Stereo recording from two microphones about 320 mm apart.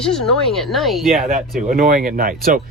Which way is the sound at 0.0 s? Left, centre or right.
Centre.